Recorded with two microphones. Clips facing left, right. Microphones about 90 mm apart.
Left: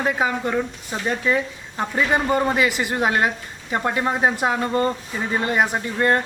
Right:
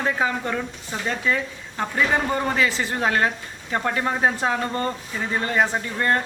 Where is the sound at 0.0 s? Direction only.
15° left (ahead or behind).